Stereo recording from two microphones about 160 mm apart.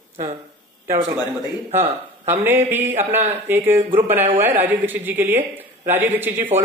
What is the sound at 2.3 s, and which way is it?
Speech, 15° right (ahead or behind).